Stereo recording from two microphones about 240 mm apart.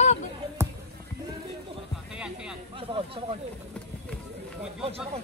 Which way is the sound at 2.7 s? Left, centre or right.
Right.